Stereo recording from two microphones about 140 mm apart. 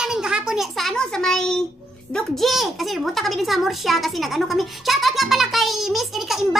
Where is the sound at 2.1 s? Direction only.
Centre (ahead or behind).